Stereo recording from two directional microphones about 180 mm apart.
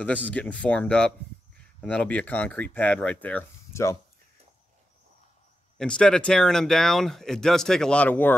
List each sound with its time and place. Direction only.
0.3 s speech: 5° left (ahead or behind)
5.8 s speech: 5° left (ahead or behind)